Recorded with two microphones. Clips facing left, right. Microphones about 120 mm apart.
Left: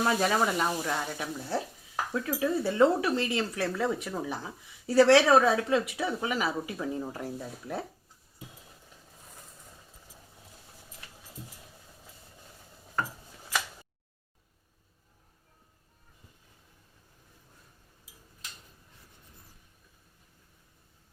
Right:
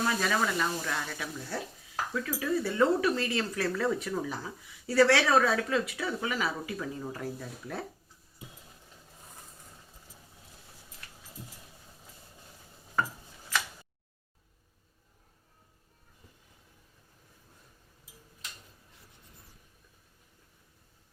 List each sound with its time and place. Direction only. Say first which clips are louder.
0.0 s speech: left 3 dB; 25° left (ahead or behind)